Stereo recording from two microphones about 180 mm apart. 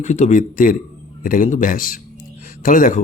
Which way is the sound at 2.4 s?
50° left (ahead or behind).